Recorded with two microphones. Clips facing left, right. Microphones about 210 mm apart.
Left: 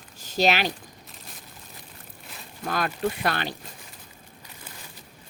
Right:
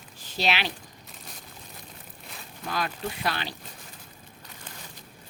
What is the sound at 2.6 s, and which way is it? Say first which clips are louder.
Speech: left 5 dB; 50° left (ahead or behind).